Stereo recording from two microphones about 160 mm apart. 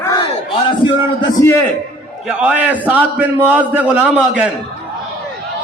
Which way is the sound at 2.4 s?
10° right (ahead or behind).